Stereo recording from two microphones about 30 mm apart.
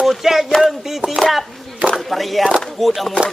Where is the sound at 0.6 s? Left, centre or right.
Centre.